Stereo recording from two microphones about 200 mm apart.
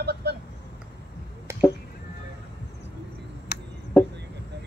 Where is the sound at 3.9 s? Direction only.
5° left (ahead or behind).